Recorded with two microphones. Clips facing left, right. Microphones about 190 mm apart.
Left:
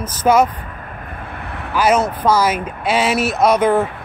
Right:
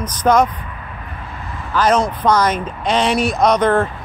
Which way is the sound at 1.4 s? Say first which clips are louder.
Left 1 dB; 65° left (ahead or behind).